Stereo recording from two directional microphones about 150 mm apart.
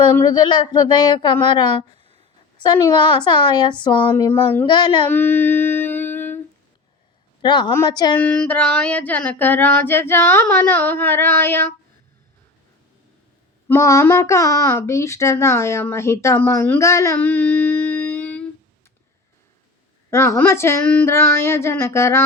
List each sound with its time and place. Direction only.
0.3 s speech: 30° left (ahead or behind)
4.1 s a child's voice: 15° left (ahead or behind)
4.6 s speech: 30° left (ahead or behind)
5.0 s humming: 15° left (ahead or behind)
7.4 s a woman's voice: 30° left (ahead or behind)
8.1 s a child's voice: 10° left (ahead or behind)
13.7 s a child's voice: 20° left (ahead or behind)
20.1 s a child's voice: 15° left (ahead or behind)